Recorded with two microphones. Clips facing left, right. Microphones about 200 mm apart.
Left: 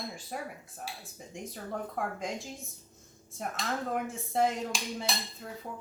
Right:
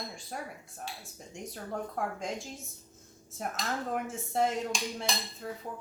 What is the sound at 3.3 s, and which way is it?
Speech, centre (ahead or behind).